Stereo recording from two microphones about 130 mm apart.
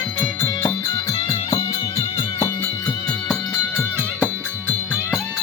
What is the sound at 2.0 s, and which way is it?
Music, 45° left (ahead or behind).